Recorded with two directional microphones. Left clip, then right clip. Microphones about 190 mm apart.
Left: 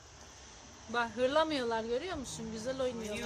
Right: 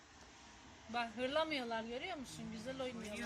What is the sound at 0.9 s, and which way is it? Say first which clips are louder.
Speech: left 8 dB; 15° left (ahead or behind).